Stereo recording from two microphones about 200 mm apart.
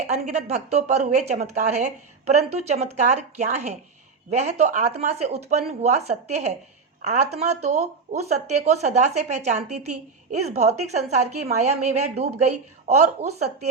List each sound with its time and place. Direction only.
0.1 s a woman's voice: 35° right (ahead or behind)